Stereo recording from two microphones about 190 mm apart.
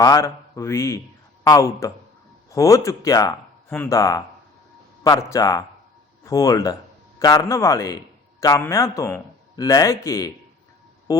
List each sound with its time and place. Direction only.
0.0 s a man's voice: 15° left (ahead or behind)